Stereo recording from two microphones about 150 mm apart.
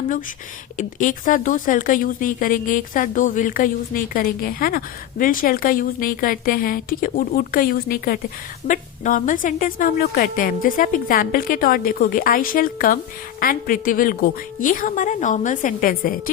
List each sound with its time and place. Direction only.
0.8 s speech: 60° left (ahead or behind); by 4.8 s 75° left (ahead or behind)
5.2 s a woman's voice: 65° left (ahead or behind)
8.6 s a woman's voice: 60° left (ahead or behind)